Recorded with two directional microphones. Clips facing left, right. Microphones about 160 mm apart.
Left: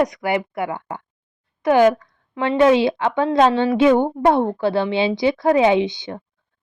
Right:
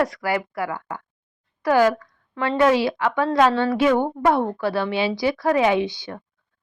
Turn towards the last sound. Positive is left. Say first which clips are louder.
# left 3 dB
turn(degrees=20)  # may be behind; listen again after turning